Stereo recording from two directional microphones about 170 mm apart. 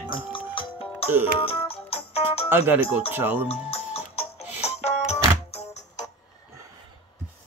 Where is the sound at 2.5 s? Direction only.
10° right (ahead or behind).